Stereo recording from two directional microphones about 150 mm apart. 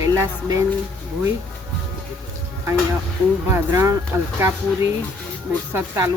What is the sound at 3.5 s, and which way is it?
Speech, 20° right (ahead or behind).